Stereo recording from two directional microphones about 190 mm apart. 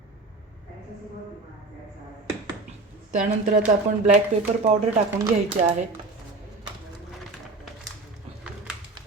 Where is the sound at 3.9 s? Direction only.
35° right (ahead or behind).